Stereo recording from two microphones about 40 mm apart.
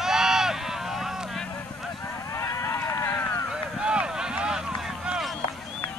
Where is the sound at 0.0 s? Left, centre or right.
Centre.